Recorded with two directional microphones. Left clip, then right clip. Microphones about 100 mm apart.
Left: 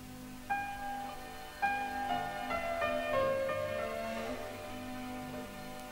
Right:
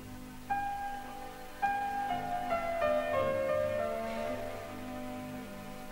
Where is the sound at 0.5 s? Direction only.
30° right (ahead or behind).